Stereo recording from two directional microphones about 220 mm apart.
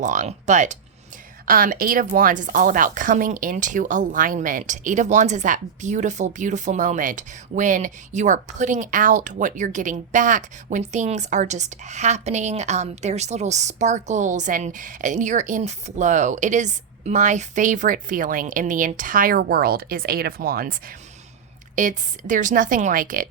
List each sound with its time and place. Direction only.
0.0 s a woman's voice: 35° right (ahead or behind)
21.8 s a woman's voice: 35° right (ahead or behind)